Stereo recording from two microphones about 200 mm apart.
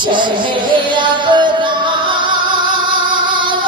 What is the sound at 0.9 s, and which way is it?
Music, 25° right (ahead or behind).